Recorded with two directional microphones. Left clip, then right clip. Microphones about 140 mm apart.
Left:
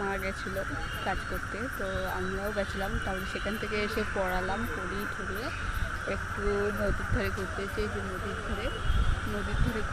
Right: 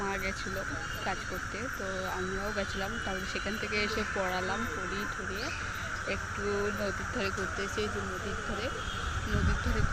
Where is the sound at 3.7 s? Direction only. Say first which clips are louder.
Even; 25° left (ahead or behind).